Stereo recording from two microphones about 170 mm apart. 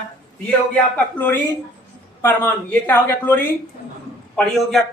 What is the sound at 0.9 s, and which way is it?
Speech, 10° left (ahead or behind).